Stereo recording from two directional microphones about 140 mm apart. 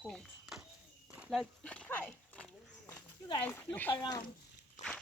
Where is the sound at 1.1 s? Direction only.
10° right (ahead or behind).